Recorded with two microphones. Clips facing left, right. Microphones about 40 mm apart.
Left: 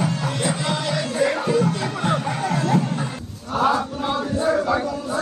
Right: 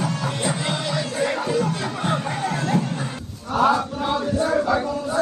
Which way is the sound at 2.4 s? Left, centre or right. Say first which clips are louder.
Left 2 dB; right.